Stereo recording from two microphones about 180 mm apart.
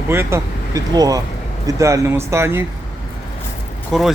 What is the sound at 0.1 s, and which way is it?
Speech, 15° right (ahead or behind).